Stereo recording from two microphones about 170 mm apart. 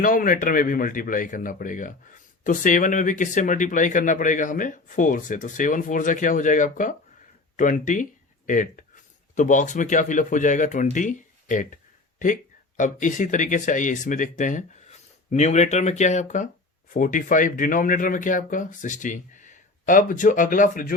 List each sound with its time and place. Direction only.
0.0 s speech: 55° left (ahead or behind)